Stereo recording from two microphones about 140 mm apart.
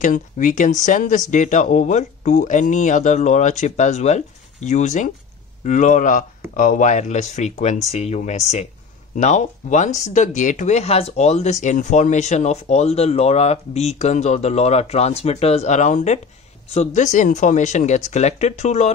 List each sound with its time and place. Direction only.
0.0 s speech: 65° left (ahead or behind)